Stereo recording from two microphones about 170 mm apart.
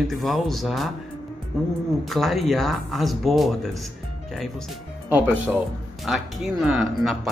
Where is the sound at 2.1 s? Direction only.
Centre (ahead or behind).